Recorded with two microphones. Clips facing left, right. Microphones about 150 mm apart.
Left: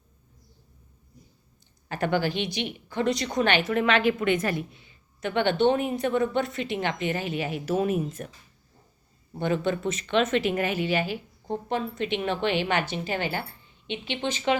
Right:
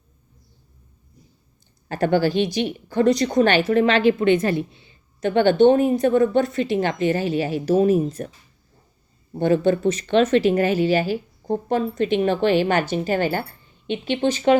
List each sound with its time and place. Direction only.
1.9 s a woman's voice: 35° right (ahead or behind)
9.4 s a woman's voice: 40° right (ahead or behind)